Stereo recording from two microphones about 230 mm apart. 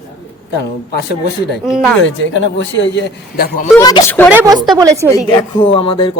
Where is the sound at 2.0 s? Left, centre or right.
Left.